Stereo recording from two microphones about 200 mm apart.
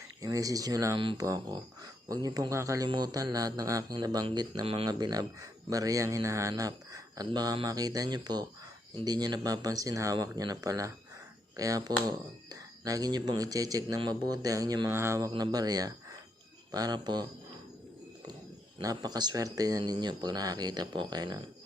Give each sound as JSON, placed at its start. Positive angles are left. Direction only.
{"t": 0.2, "sound": "speech", "side_deg": -15}
{"t": 18.8, "sound": "speech", "side_deg": -20}